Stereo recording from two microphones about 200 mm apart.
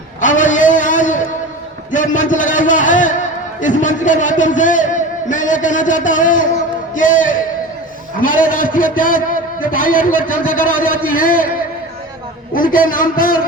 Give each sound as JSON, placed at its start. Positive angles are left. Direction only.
{"t": 0.2, "sound": "a sound", "side_deg": 40}
{"t": 1.9, "sound": "a man's voice", "side_deg": 40}
{"t": 6.9, "sound": "music", "side_deg": 40}
{"t": 8.2, "sound": "a man's voice", "side_deg": 45}
{"t": 12.5, "sound": "a man's voice", "side_deg": 45}